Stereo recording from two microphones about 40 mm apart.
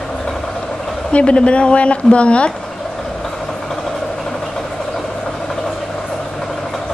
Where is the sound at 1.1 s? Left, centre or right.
Left.